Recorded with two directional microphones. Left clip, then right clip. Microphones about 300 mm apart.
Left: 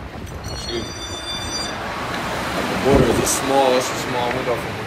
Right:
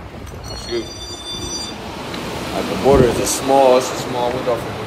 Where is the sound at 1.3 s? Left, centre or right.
Centre.